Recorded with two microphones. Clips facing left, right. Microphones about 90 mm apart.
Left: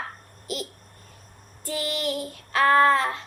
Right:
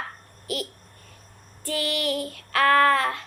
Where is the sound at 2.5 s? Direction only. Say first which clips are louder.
Even; 20° left (ahead or behind).